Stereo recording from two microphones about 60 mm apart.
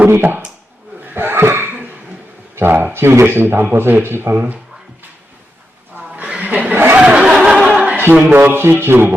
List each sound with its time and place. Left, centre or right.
0.1 s a man's voice: right
1.0 s a sound: right
2.6 s a man's voice: right
6.4 s a sound: right
7.4 s choir: centre
8.3 s a man's voice: right